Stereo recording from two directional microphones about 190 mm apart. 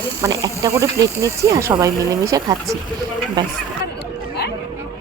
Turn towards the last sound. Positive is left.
turn(degrees=-20)  # may be behind; listen again after turning